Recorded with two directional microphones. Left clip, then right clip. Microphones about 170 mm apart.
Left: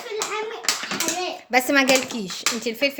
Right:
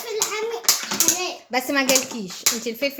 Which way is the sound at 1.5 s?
15° left (ahead or behind).